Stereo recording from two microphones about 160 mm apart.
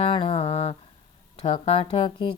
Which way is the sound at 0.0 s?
35° left (ahead or behind).